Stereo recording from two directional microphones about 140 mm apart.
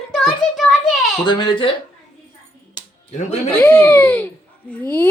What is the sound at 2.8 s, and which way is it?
Music, 30° left (ahead or behind).